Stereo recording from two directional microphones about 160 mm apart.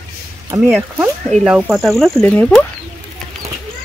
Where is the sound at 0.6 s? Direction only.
10° right (ahead or behind); by 2.7 s 10° left (ahead or behind).